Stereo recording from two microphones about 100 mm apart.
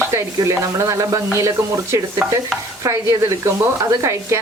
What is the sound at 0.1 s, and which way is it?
Speech, 30° right (ahead or behind).